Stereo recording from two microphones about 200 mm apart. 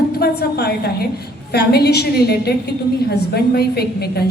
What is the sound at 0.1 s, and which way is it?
A man's voice, 50° left (ahead or behind).